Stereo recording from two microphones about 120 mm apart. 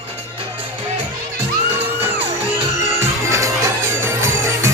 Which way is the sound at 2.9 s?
25° right (ahead or behind).